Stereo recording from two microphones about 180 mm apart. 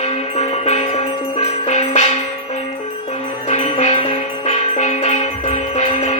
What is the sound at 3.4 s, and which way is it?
Music, 40° left (ahead or behind).